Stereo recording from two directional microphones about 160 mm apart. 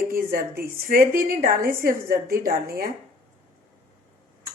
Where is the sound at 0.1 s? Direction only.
65° right (ahead or behind).